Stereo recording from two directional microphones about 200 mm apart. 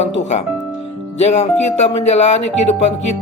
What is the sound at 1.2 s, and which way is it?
Speech, 35° left (ahead or behind).